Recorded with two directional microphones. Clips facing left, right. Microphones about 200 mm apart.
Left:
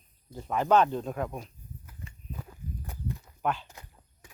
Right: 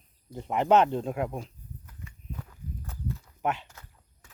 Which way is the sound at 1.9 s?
10° left (ahead or behind).